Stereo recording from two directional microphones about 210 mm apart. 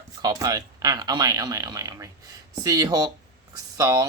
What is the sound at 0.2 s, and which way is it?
Speech, 20° right (ahead or behind).